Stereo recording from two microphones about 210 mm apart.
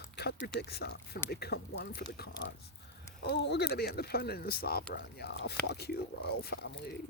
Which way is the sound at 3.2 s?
50° left (ahead or behind).